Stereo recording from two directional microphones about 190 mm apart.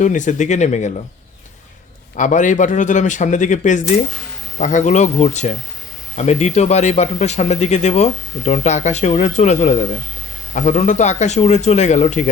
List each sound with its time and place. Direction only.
0.0 s speech: 40° left (ahead or behind)
2.1 s speech: 40° left (ahead or behind)